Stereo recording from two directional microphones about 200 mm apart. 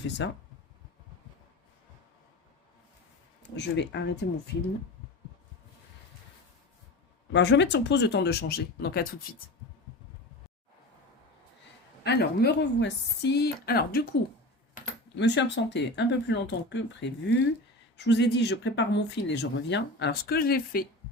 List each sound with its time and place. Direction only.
0.2 s speech: 60° left (ahead or behind)
3.5 s speech: 60° left (ahead or behind)
7.3 s speech: 60° left (ahead or behind)
12.0 s speech: 55° left (ahead or behind)
15.2 s speech: 60° left (ahead or behind)